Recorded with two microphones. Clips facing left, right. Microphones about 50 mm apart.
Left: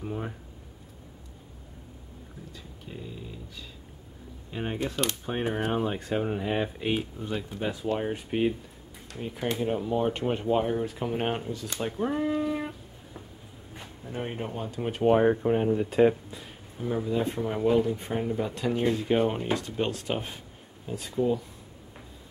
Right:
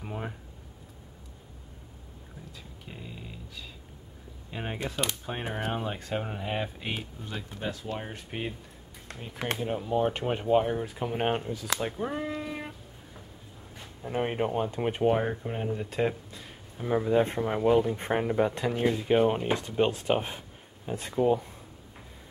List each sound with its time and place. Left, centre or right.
0.0 s a sound: centre
4.5 s speech: centre
9.6 s speech: centre
11.8 s a sound: centre
14.1 s speech: right
14.8 s speech: centre
15.0 s speech: centre
16.8 s speech: right
17.6 s speech: centre
17.9 s speech: right
18.7 s speech: centre
19.5 s speech: centre
20.8 s speech: right